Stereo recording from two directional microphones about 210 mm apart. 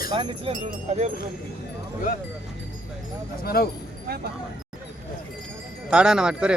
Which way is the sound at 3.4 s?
45° left (ahead or behind).